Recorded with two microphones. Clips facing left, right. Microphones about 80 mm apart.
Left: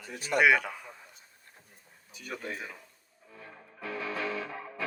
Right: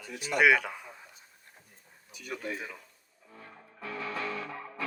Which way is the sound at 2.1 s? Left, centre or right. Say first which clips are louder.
Right 1 dB; left.